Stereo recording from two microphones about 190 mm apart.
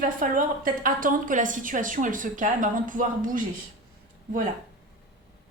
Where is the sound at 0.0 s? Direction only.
45° right (ahead or behind).